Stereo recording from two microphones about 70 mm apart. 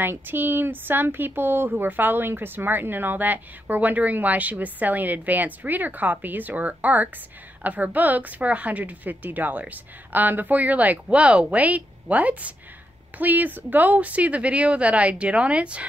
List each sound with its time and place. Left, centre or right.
0.0 s speech: right